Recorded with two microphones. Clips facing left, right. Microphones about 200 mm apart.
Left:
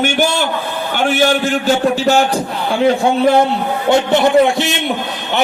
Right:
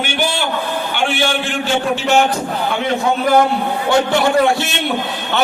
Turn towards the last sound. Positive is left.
turn(degrees=20)  # may be behind; listen again after turning